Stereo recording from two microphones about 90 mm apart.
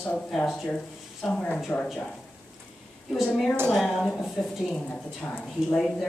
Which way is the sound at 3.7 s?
Centre (ahead or behind).